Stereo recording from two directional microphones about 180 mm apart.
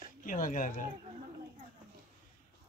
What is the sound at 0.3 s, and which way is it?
Speech, 45° left (ahead or behind).